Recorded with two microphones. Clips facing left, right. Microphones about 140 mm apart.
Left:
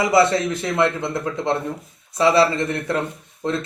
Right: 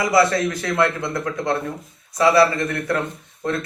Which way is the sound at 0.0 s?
25° left (ahead or behind).